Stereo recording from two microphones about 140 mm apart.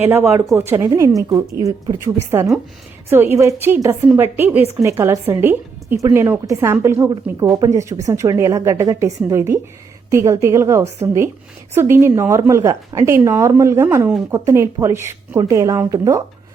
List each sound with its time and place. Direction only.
0.0 s a woman's voice: 15° right (ahead or behind)